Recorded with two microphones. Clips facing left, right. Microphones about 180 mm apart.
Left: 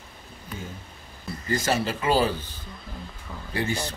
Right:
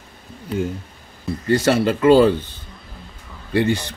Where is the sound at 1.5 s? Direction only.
65° right (ahead or behind).